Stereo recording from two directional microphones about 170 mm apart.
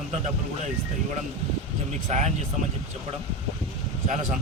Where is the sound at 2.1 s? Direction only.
45° right (ahead or behind).